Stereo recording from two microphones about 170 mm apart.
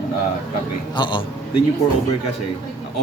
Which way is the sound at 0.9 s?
25° left (ahead or behind).